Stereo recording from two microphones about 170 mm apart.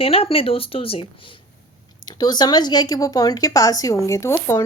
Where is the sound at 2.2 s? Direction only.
25° left (ahead or behind).